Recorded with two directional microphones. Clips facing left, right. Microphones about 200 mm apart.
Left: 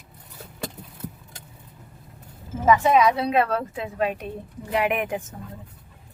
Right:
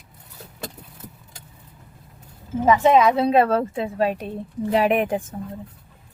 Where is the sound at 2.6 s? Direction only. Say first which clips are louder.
Right 2 dB; 25° right (ahead or behind).